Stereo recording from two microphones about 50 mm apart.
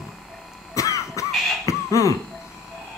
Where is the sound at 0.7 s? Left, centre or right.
Left.